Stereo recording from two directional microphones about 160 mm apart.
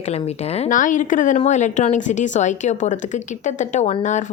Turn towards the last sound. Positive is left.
turn(degrees=45)  # may be behind; listen again after turning